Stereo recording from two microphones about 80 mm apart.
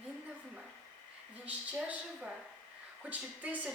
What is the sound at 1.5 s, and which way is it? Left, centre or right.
A woman's voice, centre.